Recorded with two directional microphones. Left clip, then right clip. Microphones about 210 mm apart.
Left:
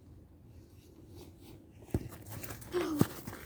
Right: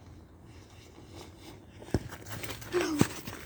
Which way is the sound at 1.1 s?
40° right (ahead or behind).